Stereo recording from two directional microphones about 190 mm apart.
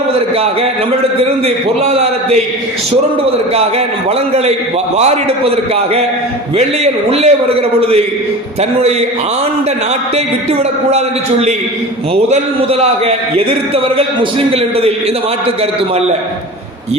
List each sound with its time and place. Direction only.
1.2 s a man's voice: 30° right (ahead or behind)
4.9 s a man's voice: 35° right (ahead or behind)
10.9 s a man's voice: 35° right (ahead or behind)
12.8 s a man's voice: 30° right (ahead or behind)